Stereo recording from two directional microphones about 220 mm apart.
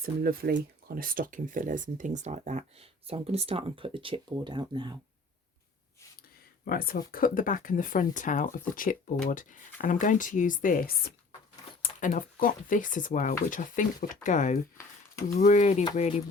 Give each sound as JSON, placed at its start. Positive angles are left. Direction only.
{"t": 0.0, "sound": "speech", "side_deg": -40}
{"t": 6.7, "sound": "speech", "side_deg": 40}